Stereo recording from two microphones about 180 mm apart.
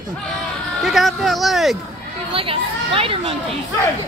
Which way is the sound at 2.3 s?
30° right (ahead or behind).